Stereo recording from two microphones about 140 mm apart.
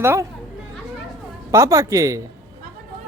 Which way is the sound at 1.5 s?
25° right (ahead or behind).